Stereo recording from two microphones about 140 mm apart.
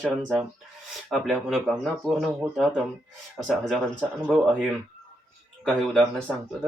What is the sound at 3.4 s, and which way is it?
Speech, centre (ahead or behind).